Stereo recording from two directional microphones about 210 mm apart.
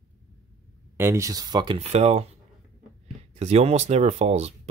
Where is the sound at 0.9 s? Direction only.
10° right (ahead or behind).